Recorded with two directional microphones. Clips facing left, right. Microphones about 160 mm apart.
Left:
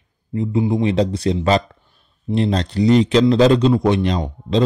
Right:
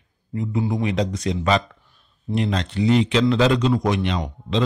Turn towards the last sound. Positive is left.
turn(degrees=35)  # may be behind; listen again after turning